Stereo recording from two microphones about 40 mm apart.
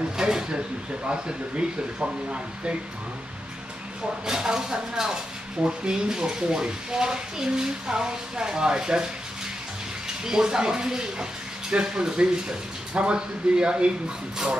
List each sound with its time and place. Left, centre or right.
0.2 s speech: centre
4.3 s speech: centre